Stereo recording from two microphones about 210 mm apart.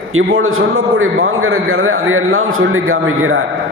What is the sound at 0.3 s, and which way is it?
A man's voice, 75° right (ahead or behind).